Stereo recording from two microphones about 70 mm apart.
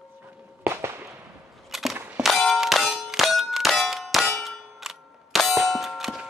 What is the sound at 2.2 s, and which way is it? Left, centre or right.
Clang, centre.